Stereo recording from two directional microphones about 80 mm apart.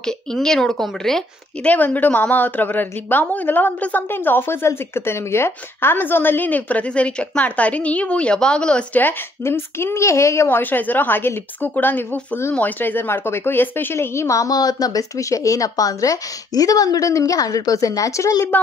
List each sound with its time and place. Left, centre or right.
0.0 s a woman's voice: centre
1.7 s a woman's voice: left
9.0 s a woman's voice: left
18.5 s a woman's voice: left